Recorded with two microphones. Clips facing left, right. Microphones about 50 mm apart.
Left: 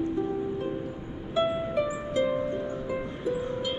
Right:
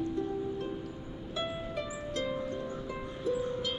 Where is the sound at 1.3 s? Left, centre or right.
Left.